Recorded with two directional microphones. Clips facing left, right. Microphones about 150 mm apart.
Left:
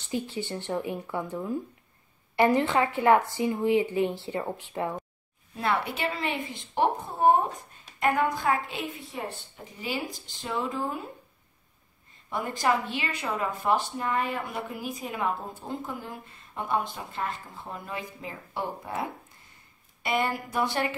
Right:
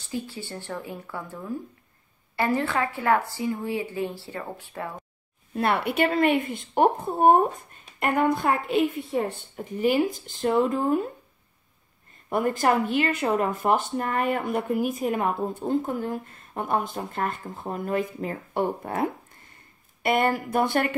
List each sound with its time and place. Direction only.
0.1 s a woman's voice: 20° left (ahead or behind)
5.6 s a woman's voice: 60° right (ahead or behind)
12.3 s a woman's voice: 50° right (ahead or behind)